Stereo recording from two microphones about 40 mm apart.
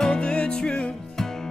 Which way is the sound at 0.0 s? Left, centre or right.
Left.